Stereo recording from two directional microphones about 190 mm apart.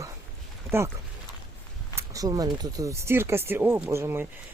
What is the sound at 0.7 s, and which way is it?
Speech, 15° right (ahead or behind).